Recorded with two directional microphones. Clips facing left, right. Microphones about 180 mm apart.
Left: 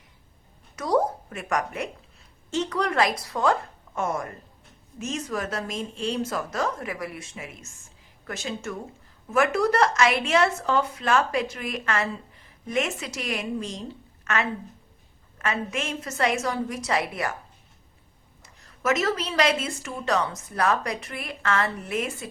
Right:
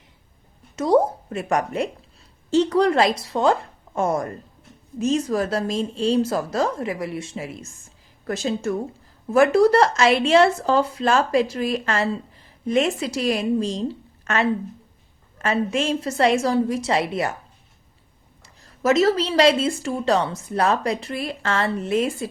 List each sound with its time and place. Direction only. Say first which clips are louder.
0.8 s a woman's voice: right 5 dB; 25° right (ahead or behind)
18.4 s speech: right 6 dB; 30° right (ahead or behind)